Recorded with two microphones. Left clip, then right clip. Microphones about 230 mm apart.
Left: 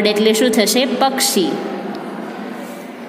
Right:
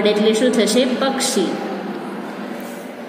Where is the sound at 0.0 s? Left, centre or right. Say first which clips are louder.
Left 1 dB; left.